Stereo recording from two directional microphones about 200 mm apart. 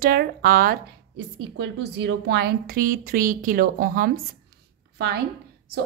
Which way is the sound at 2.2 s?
55° right (ahead or behind).